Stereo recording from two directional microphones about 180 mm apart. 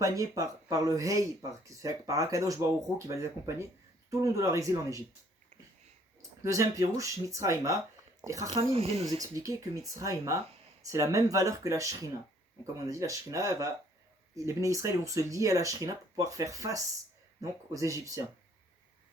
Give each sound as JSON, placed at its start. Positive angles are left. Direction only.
{"t": 0.0, "sound": "speech", "side_deg": -20}
{"t": 6.4, "sound": "speech", "side_deg": -15}
{"t": 9.0, "sound": "speech", "side_deg": -20}